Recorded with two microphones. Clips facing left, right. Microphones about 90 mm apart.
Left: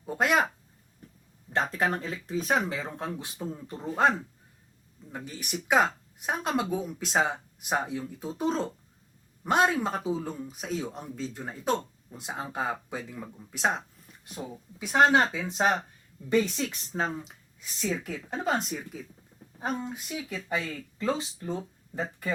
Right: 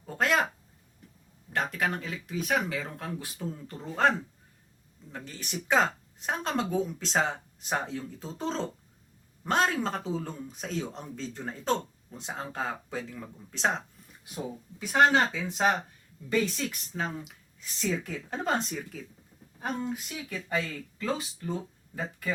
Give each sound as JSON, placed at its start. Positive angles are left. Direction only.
{"t": 0.0, "sound": "a sound", "side_deg": 15}
{"t": 1.5, "sound": "speech", "side_deg": 30}
{"t": 5.1, "sound": "speech", "side_deg": 15}
{"t": 17.6, "sound": "speech", "side_deg": 10}